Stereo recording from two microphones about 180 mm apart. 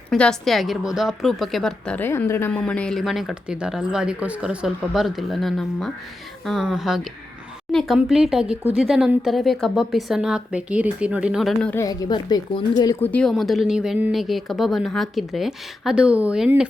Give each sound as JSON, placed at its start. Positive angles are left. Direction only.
{"t": 0.1, "sound": "a woman's voice", "side_deg": 0}
{"t": 11.7, "sound": "a woman's voice", "side_deg": 20}
{"t": 13.0, "sound": "a woman's voice", "side_deg": 10}